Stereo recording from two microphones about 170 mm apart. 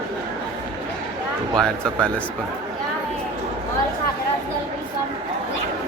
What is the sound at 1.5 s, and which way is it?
Speech, 5° left (ahead or behind).